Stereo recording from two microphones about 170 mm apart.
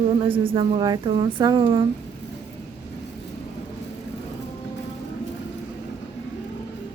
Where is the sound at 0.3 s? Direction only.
30° right (ahead or behind).